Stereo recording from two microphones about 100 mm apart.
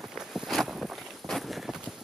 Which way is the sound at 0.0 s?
Centre (ahead or behind).